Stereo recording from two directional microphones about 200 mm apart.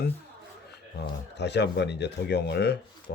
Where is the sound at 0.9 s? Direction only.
55° left (ahead or behind).